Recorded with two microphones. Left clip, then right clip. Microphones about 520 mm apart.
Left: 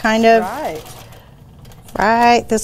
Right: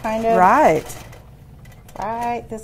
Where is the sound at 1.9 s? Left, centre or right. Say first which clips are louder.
Left 12 dB; left.